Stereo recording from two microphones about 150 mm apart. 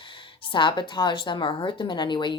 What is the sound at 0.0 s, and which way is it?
Speech, 35° left (ahead or behind).